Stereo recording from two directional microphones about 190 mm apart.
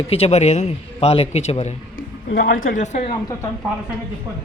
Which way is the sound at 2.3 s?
45° left (ahead or behind).